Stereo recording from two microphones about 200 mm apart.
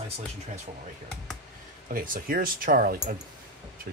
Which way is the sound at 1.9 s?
45° right (ahead or behind).